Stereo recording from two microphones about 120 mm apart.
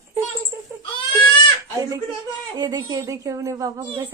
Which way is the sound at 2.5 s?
35° right (ahead or behind).